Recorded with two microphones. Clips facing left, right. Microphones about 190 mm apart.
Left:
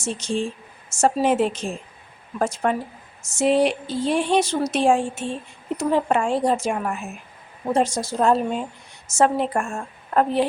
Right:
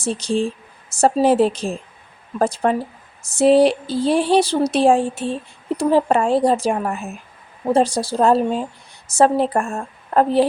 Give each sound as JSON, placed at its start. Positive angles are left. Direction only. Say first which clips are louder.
{"t": 0.0, "sound": "a woman's voice", "louder": "right 5 dB", "side_deg": -35}